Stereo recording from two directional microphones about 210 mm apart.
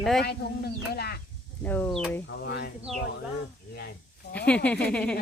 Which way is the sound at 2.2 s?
55° left (ahead or behind).